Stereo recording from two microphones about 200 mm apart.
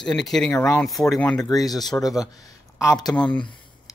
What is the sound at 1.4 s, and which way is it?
Speech, 20° left (ahead or behind).